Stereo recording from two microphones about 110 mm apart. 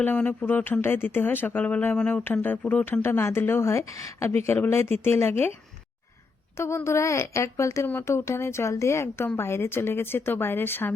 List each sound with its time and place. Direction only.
0.0 s speech: 15° left (ahead or behind)
6.6 s speech: 25° left (ahead or behind)